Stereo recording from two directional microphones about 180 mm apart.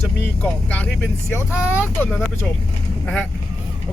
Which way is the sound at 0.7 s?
10° left (ahead or behind).